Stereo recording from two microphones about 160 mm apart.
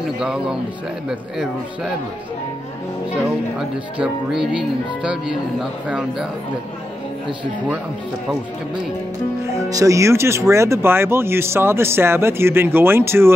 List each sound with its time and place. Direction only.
0.0 s speech: 5° right (ahead or behind)
3.5 s speech: 5° right (ahead or behind)
9.5 s speech: 20° right (ahead or behind)